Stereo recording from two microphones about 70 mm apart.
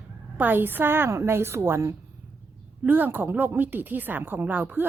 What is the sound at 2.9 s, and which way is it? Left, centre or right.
Speech, right.